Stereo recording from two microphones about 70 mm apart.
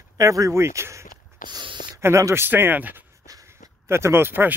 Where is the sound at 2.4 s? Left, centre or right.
Right.